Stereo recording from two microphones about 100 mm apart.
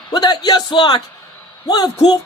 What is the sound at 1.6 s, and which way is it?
Speech, 45° left (ahead or behind).